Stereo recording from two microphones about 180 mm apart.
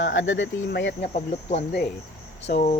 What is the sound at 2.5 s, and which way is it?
Speech, 55° left (ahead or behind).